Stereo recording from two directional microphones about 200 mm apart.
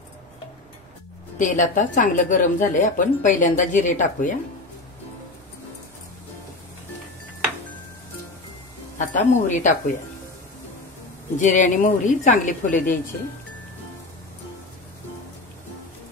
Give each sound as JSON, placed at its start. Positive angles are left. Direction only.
{"t": 1.4, "sound": "a woman's voice", "side_deg": 40}
{"t": 8.9, "sound": "a woman's voice", "side_deg": 40}
{"t": 11.3, "sound": "a woman's voice", "side_deg": 40}